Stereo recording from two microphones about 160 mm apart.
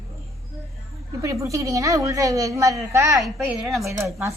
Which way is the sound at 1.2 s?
20° right (ahead or behind).